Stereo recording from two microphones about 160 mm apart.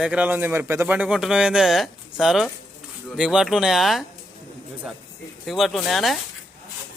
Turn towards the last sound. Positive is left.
turn(degrees=0)  # may be behind; listen again after turning